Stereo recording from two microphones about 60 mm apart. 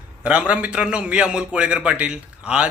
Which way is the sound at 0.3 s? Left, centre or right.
Right.